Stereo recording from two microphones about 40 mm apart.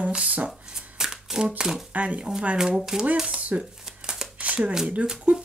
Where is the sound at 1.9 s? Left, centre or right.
Right.